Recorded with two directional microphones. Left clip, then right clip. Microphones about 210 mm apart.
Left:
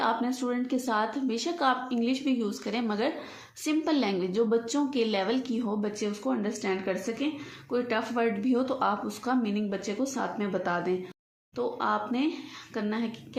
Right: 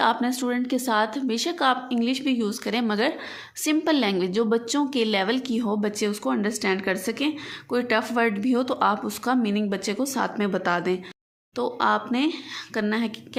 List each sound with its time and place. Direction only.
0.0 s speech: 30° right (ahead or behind)